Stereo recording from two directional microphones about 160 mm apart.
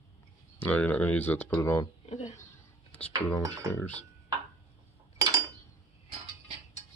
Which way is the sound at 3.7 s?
10° left (ahead or behind).